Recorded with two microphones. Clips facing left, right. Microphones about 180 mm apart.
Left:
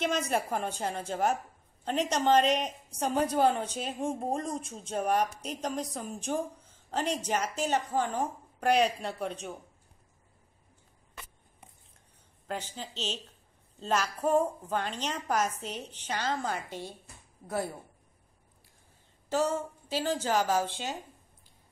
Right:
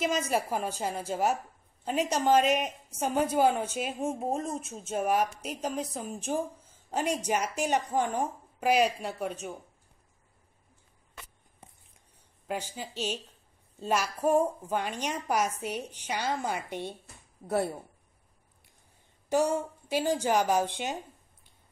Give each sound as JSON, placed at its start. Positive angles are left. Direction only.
{"t": 0.0, "sound": "a woman's voice", "side_deg": -5}
{"t": 12.4, "sound": "a woman's voice", "side_deg": -10}
{"t": 17.5, "sound": "speech", "side_deg": -30}
{"t": 19.2, "sound": "a woman's voice", "side_deg": -15}